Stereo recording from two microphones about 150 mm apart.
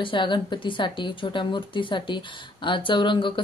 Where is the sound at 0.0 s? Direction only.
35° left (ahead or behind).